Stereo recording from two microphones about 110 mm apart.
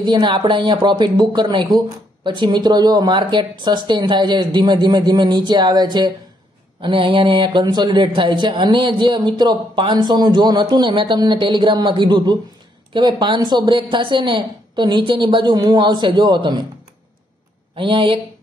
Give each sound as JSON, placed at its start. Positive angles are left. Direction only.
{"t": 0.0, "sound": "speech", "side_deg": -45}
{"t": 17.7, "sound": "speech", "side_deg": -50}